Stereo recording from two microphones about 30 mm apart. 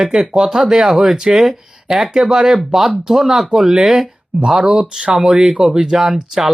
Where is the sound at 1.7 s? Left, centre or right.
Centre.